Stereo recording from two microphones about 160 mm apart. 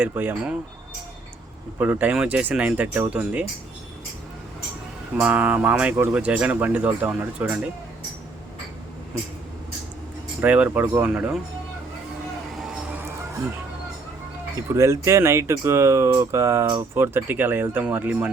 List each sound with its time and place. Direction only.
0.0 s speech: 10° right (ahead or behind)
1.8 s speech: 10° right (ahead or behind)
5.1 s speech: 10° right (ahead or behind)
10.4 s speech: 10° right (ahead or behind)
12.7 s music: 10° right (ahead or behind)
14.7 s speech: 15° right (ahead or behind)